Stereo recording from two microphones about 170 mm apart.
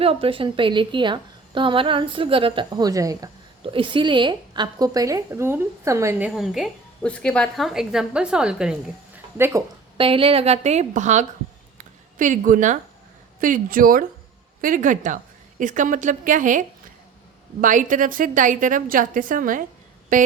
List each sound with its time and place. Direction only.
0.0 s a woman's voice: 35° right (ahead or behind); by 8.7 s 5° right (ahead or behind)
9.4 s speech: 20° right (ahead or behind)
10.0 s a woman's voice: 30° right (ahead or behind)
11.8 s a sound: 50° right (ahead or behind)
13.4 s a woman's voice: 55° right (ahead or behind)